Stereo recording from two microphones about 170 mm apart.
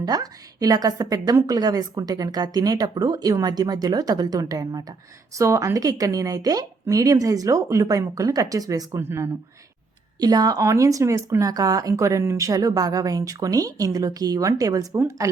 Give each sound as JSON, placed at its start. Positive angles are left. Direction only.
{"t": 0.0, "sound": "a woman's voice", "side_deg": -20}